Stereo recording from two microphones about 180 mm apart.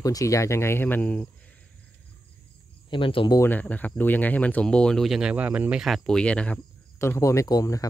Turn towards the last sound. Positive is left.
turn(degrees=20)  # may be behind; listen again after turning